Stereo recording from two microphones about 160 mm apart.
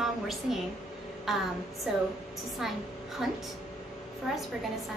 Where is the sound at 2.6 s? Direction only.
5° right (ahead or behind).